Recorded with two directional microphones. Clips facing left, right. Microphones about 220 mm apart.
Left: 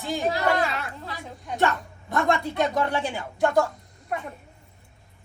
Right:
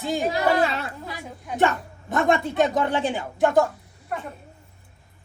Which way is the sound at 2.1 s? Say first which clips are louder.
Right 3 dB; 20° right (ahead or behind).